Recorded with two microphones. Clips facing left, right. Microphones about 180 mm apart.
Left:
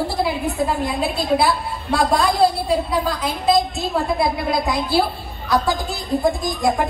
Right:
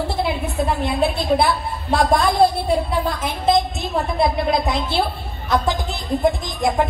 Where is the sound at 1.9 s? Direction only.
20° right (ahead or behind).